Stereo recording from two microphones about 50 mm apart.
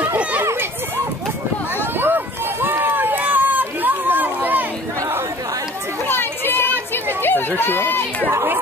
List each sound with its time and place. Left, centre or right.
2.0 s run: right
6.0 s a sound: left
7.2 s chatter: left